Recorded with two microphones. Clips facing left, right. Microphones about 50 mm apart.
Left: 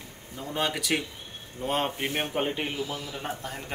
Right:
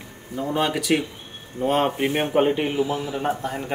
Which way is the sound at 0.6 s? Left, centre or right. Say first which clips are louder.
Right 5 dB; centre.